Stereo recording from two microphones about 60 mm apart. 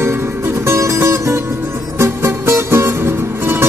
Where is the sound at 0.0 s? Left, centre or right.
Right.